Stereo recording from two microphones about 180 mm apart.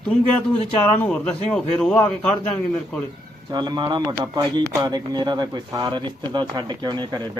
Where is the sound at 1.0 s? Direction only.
5° left (ahead or behind).